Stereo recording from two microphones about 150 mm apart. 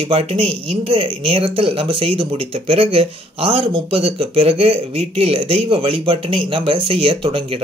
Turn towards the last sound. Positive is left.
turn(degrees=-35)  # may be behind; listen again after turning